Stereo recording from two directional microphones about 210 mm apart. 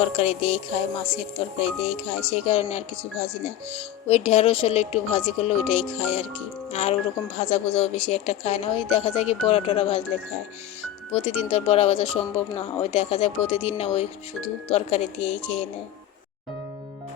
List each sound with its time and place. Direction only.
0.0 s speech: 30° left (ahead or behind)
1.8 s speech: 30° left (ahead or behind)
11.1 s speech: 30° left (ahead or behind)